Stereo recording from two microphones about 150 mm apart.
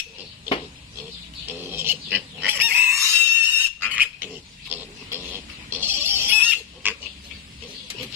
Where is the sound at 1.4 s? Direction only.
15° right (ahead or behind).